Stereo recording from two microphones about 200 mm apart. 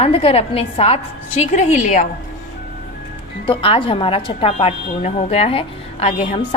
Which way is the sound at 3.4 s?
25° left (ahead or behind).